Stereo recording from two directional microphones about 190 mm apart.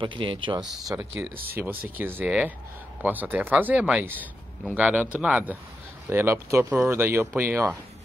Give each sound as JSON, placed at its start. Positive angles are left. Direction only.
{"t": 0.0, "sound": "speech", "side_deg": -25}
{"t": 0.8, "sound": "speech", "side_deg": -10}
{"t": 1.3, "sound": "speech", "side_deg": -55}
{"t": 1.6, "sound": "speech", "side_deg": -10}